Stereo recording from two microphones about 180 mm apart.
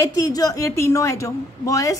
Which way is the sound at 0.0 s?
20° left (ahead or behind).